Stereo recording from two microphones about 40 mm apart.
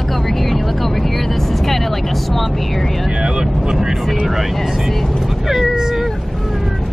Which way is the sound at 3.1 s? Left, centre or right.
Right.